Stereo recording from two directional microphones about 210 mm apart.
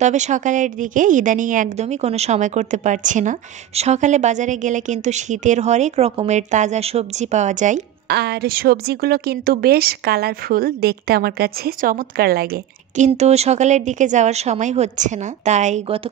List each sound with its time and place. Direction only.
0.0 s a woman's voice: 35° right (ahead or behind)
8.1 s a woman's voice: 50° right (ahead or behind); by 16.0 s 35° right (ahead or behind)